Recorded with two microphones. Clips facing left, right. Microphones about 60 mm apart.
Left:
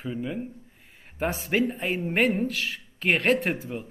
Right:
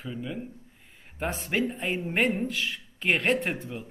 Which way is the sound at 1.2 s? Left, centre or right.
Centre.